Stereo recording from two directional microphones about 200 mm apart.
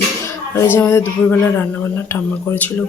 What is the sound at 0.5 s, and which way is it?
Speech, 10° left (ahead or behind).